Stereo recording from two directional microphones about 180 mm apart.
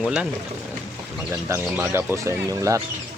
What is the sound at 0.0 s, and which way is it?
Speech, 5° right (ahead or behind).